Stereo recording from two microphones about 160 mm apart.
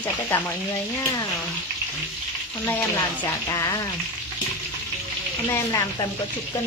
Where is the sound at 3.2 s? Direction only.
25° left (ahead or behind).